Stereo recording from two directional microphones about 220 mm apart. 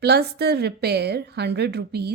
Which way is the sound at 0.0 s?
50° right (ahead or behind).